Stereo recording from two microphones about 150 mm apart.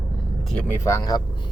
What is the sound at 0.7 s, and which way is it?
Speech, 20° left (ahead or behind).